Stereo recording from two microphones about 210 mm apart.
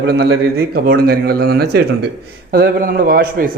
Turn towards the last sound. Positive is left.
turn(degrees=-45)  # may be behind; listen again after turning